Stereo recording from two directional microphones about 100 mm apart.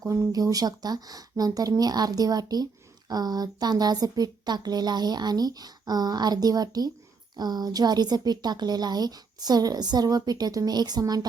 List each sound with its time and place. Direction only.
0.0 s a woman's voice: 35° right (ahead or behind)